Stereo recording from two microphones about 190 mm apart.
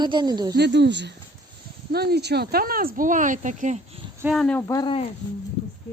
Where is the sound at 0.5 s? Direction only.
60° right (ahead or behind); by 3.8 s 40° right (ahead or behind).